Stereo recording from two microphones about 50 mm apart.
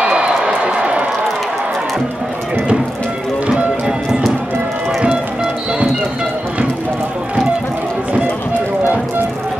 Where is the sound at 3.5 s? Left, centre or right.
Centre.